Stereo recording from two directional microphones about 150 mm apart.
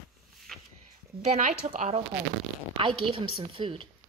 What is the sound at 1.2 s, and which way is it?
Speech, 50° right (ahead or behind).